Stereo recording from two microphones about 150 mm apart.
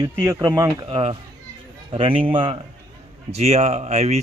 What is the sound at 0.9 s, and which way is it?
Speech, 35° right (ahead or behind).